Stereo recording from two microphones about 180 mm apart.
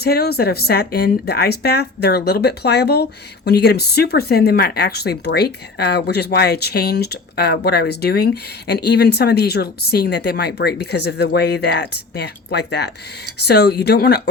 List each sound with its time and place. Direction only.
0.0 s speech: 60° left (ahead or behind)